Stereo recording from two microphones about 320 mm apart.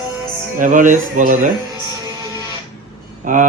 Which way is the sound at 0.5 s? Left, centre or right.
Right.